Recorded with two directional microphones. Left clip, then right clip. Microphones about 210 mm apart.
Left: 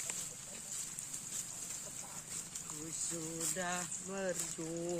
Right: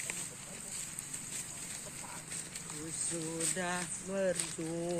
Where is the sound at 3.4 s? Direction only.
50° left (ahead or behind).